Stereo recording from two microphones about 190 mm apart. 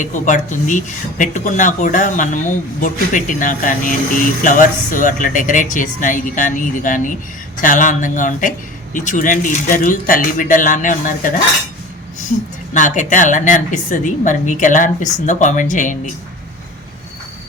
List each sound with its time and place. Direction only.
0.0 s speech: 40° left (ahead or behind)
12.7 s a woman's voice: 40° left (ahead or behind)